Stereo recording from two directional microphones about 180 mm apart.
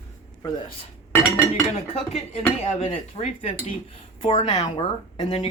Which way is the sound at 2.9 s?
35° left (ahead or behind).